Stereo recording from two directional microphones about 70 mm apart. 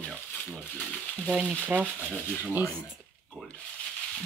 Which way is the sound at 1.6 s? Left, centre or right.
Right.